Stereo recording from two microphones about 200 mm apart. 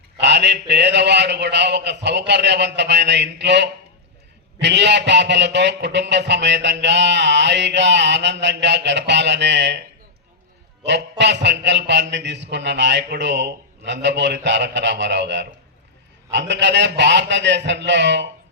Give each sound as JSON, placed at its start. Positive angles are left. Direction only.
{"t": 0.2, "sound": "a man's voice", "side_deg": -60}
{"t": 11.2, "sound": "a man's voice", "side_deg": -60}